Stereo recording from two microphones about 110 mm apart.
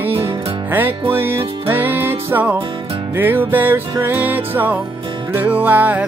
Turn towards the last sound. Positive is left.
turn(degrees=-15)  # may be behind; listen again after turning